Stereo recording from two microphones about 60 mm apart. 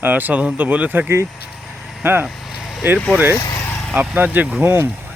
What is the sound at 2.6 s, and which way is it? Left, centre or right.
Vehicle, centre.